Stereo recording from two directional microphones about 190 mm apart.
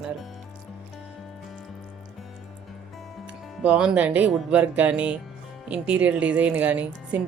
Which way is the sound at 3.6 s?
5° right (ahead or behind).